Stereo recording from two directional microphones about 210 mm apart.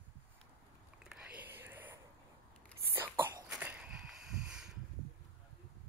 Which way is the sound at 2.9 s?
10° right (ahead or behind).